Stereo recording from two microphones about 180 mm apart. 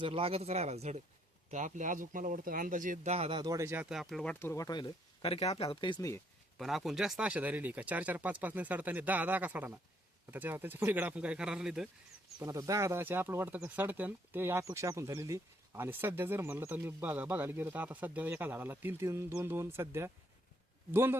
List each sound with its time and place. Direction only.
0.0 s speech: 30° right (ahead or behind); by 6.1 s 20° left (ahead or behind)
6.6 s speech: centre (ahead or behind)
12.4 s speech: 20° right (ahead or behind)